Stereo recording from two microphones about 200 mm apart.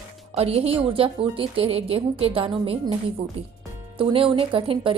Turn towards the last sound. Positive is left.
turn(degrees=-25)  # may be behind; listen again after turning